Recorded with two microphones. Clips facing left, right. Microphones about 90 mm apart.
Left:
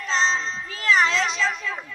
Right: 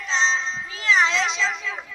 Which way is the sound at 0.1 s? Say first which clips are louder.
Even; 5° left (ahead or behind).